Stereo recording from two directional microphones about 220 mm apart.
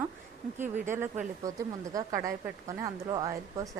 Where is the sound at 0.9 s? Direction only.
10° right (ahead or behind).